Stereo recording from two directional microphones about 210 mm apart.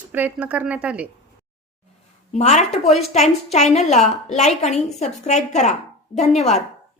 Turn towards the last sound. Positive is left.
turn(degrees=30)  # may be behind; listen again after turning